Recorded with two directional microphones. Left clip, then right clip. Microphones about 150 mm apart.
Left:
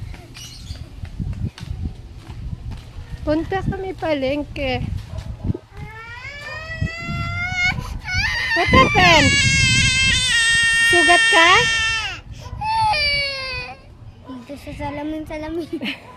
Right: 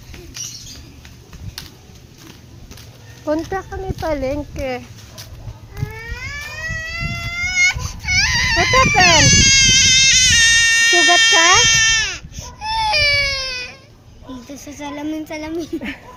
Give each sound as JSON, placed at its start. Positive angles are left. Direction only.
{"t": 3.2, "sound": "speech", "side_deg": 25}
{"t": 4.5, "sound": "a child's voice", "side_deg": 40}
{"t": 7.2, "sound": "baby cry", "side_deg": 20}
{"t": 14.6, "sound": "speech", "side_deg": 20}